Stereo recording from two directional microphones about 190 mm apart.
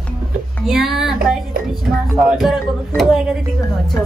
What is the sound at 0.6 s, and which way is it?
Speech, centre (ahead or behind).